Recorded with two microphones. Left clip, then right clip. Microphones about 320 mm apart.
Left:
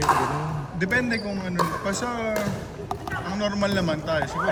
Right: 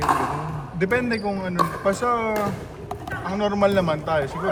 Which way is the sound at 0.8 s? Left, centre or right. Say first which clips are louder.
Right 2 dB; centre.